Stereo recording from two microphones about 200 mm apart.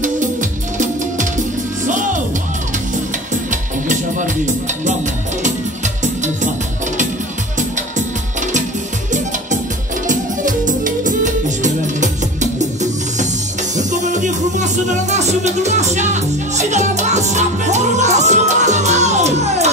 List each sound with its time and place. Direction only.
0.0 s music: 40° right (ahead or behind)
3.4 s music: 40° right (ahead or behind)
10.0 s music: 40° right (ahead or behind)